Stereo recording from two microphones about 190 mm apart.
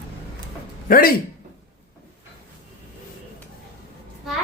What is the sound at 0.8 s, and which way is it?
Speech, 50° left (ahead or behind).